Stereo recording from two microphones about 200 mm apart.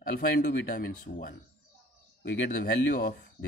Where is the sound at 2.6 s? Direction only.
55° left (ahead or behind).